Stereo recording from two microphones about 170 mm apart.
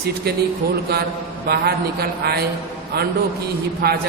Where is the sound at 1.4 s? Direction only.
70° right (ahead or behind).